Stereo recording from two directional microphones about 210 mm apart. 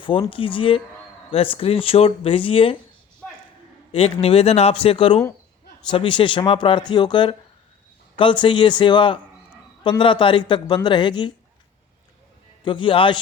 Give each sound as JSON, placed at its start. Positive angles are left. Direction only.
{"t": 0.0, "sound": "speech", "side_deg": 25}
{"t": 3.9, "sound": "speech", "side_deg": 30}
{"t": 12.6, "sound": "speech", "side_deg": 25}